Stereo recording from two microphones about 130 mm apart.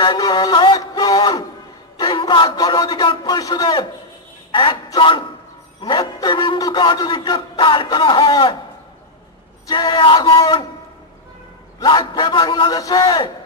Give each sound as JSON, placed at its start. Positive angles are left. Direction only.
{"t": 0.0, "sound": "music", "side_deg": 35}
{"t": 2.0, "sound": "a man's voice", "side_deg": 35}
{"t": 9.7, "sound": "a man's voice", "side_deg": 30}
{"t": 11.8, "sound": "a man's voice", "side_deg": 35}